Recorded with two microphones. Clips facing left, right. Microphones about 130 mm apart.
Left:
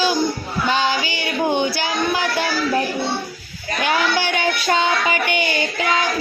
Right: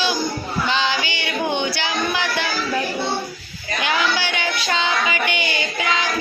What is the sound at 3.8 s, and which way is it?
Child singing, 45° left (ahead or behind).